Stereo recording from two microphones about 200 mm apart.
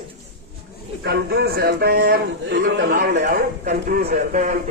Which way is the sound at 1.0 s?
55° right (ahead or behind).